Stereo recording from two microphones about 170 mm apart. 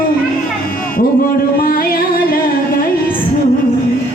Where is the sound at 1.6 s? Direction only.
55° left (ahead or behind).